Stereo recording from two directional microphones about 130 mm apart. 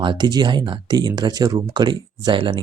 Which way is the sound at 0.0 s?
35° right (ahead or behind).